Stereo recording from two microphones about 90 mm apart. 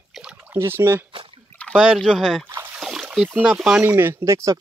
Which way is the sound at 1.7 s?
10° right (ahead or behind).